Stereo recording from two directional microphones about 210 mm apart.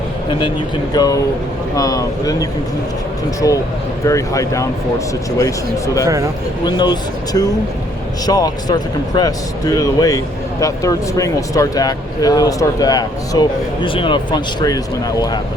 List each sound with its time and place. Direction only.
0.3 s speech: 25° left (ahead or behind)